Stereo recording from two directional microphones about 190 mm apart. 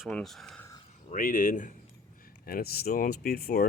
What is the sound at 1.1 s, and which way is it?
Speech, 45° left (ahead or behind).